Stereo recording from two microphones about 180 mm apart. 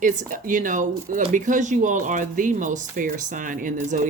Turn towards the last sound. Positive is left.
turn(degrees=-45)  # may be behind; listen again after turning